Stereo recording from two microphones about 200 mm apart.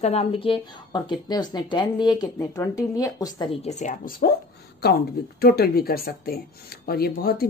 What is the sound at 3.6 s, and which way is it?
Speech, 40° left (ahead or behind).